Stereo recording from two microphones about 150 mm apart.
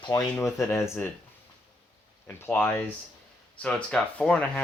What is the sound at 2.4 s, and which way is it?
Speech, 15° left (ahead or behind).